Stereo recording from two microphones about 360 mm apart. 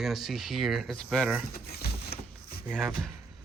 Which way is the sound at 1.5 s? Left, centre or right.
Left.